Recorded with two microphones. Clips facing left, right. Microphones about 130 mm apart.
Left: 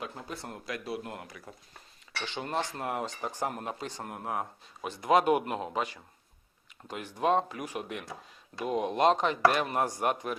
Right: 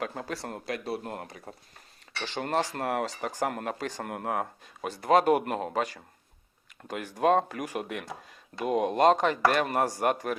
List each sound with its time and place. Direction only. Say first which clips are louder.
0.0 s speech: right 5 dB; 85° right
0.7 s speech: right 3 dB; 30° right (ahead or behind)
2.7 s speech: right 4 dB; 70° right (ahead or behind)
4.8 s speech: right 2 dB; 45° right (ahead or behind); by 8.0 s 60° right (ahead or behind)
8.5 s speech: right 3 dB; 5° right (ahead or behind)
8.8 s speech: right 3 dB; 45° right (ahead or behind)
9.6 s speech: right 3 dB; 70° right (ahead or behind)
9.9 s speech: right 3 dB; 45° right (ahead or behind)